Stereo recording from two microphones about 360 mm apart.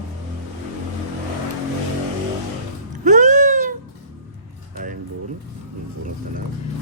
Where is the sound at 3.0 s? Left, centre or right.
Right.